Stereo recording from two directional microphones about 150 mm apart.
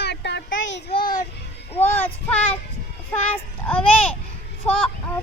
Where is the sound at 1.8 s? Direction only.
15° left (ahead or behind).